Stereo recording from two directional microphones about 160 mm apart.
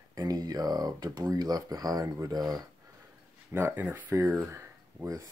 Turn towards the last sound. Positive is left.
turn(degrees=-15)  # may be behind; listen again after turning